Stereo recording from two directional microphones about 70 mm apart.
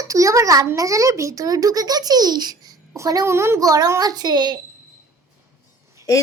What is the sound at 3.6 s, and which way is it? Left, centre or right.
Speech, right.